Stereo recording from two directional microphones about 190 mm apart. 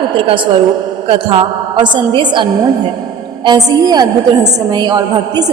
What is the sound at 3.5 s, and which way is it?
Speech, 20° right (ahead or behind).